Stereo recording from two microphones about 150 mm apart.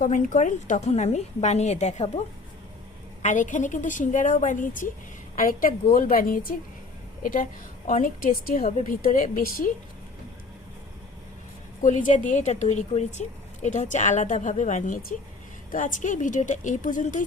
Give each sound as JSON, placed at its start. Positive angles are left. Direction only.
{"t": 0.0, "sound": "a woman's voice", "side_deg": 55}
{"t": 3.2, "sound": "a woman's voice", "side_deg": 60}
{"t": 11.8, "sound": "a woman's voice", "side_deg": 55}